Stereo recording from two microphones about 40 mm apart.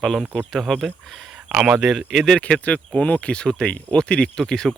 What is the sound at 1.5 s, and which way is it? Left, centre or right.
Speech, right.